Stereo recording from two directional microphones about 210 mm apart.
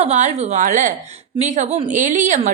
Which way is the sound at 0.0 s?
35° right (ahead or behind).